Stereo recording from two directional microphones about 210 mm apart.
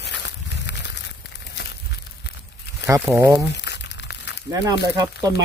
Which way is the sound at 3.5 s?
55° left (ahead or behind).